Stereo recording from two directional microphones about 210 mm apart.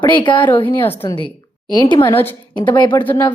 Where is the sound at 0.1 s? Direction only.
20° left (ahead or behind).